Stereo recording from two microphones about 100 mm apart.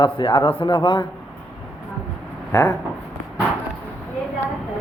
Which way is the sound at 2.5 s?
35° left (ahead or behind).